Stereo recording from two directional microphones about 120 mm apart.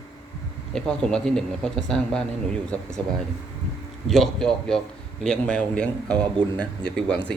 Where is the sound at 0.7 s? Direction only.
5° left (ahead or behind).